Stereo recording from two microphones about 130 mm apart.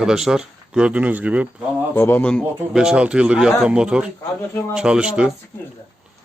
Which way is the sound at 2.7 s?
5° right (ahead or behind).